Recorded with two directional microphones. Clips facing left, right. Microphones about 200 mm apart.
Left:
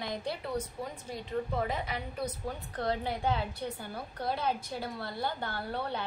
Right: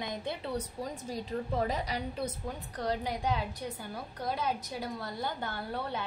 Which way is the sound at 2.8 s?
10° right (ahead or behind).